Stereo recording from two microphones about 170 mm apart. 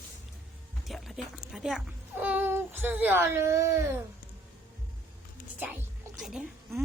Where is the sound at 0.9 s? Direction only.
Centre (ahead or behind); by 3.8 s 15° right (ahead or behind).